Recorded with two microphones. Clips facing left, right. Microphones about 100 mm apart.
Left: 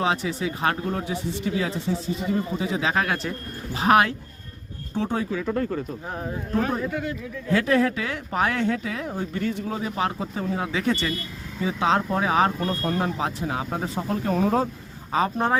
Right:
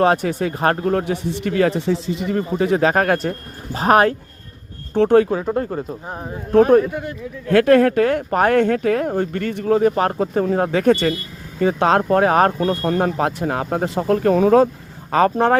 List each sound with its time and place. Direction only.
0.0 s speech: 55° right (ahead or behind)
4.9 s speech: 65° right (ahead or behind)
5.3 s speech: 35° right (ahead or behind)
7.4 s speech: 60° right (ahead or behind); by 14.7 s 80° right
15.1 s speech: 70° right (ahead or behind)